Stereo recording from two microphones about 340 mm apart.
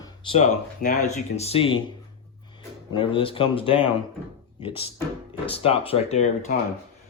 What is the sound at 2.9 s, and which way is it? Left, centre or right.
Speech, centre.